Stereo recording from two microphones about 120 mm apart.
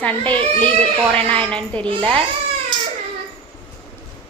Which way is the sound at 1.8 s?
45° right (ahead or behind).